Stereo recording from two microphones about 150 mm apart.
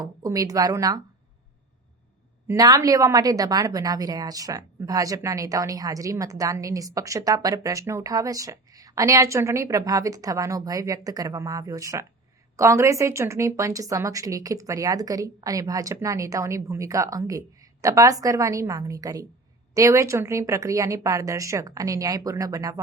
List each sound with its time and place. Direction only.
0.0 s speech: 25° right (ahead or behind)
2.5 s a woman's voice: 25° right (ahead or behind)